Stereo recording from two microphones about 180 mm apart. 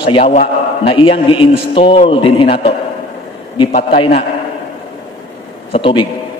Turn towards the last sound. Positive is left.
turn(degrees=30)  # may be behind; listen again after turning